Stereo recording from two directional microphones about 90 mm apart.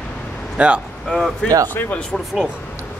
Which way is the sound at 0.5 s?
15° right (ahead or behind).